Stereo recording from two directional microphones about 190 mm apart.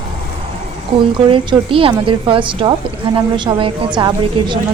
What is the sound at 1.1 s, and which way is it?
A woman's voice, 25° right (ahead or behind).